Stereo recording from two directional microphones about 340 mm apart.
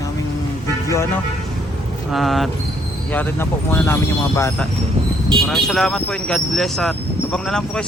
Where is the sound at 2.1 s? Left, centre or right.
Centre.